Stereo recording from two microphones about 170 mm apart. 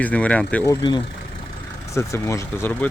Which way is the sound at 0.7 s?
25° left (ahead or behind).